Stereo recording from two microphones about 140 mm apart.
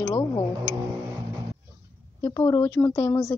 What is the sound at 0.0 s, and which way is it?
Music, 20° left (ahead or behind).